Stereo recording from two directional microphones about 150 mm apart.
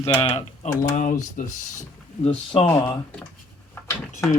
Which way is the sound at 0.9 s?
60° left (ahead or behind).